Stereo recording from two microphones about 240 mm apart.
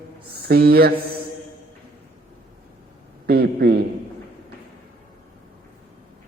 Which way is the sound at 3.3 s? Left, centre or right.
Right.